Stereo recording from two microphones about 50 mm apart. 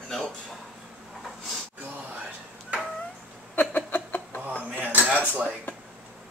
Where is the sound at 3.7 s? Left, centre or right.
Left.